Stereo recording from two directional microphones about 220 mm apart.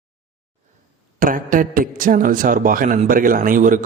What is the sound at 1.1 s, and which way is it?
A man's voice, 40° right (ahead or behind).